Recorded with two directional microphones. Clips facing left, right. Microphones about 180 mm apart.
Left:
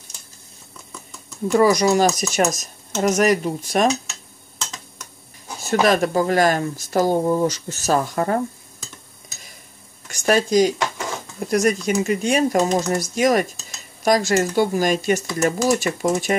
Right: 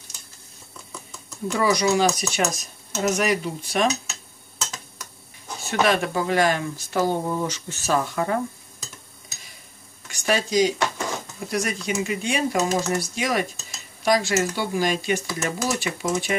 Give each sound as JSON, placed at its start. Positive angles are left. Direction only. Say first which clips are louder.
{"t": 1.5, "sound": "speech", "louder": "left 5 dB", "side_deg": 45}
{"t": 4.1, "sound": "tick-tock", "louder": "even", "side_deg": 0}
{"t": 5.7, "sound": "speech", "louder": "left 4 dB", "side_deg": 40}
{"t": 10.0, "sound": "speech", "louder": "left 5 dB", "side_deg": 45}